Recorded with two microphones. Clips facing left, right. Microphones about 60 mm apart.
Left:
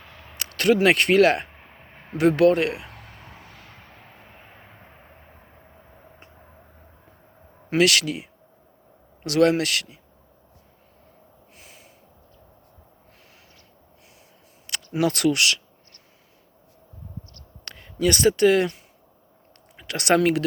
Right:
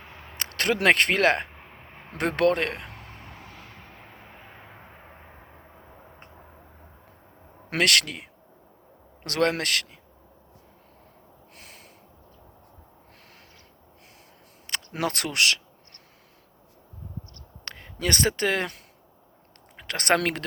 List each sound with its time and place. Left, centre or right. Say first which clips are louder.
0.3 s speech: left 6 dB; right
7.7 s speech: left 4 dB; right
11.5 s snort: right 1 dB; right
14.7 s speech: left 5 dB; right
17.7 s speech: left 6 dB; right
19.7 s speech: left 3 dB; right